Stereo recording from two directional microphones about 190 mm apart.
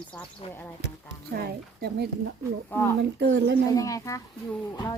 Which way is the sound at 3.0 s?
60° right (ahead or behind).